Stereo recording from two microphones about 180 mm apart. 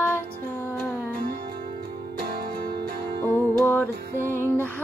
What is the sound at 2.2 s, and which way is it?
Music, 60° right (ahead or behind).